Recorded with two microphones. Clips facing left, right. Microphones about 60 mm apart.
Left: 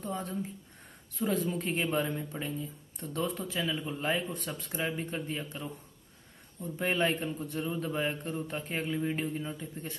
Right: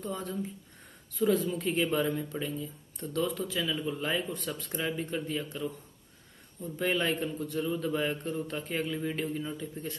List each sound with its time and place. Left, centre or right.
0.0 s a man's voice: left
6.8 s a man's voice: left